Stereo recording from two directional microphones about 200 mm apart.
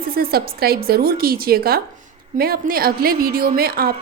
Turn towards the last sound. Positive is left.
turn(degrees=-50)  # may be behind; listen again after turning